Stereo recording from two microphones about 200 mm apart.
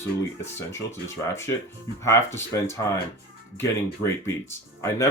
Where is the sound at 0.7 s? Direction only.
15° left (ahead or behind).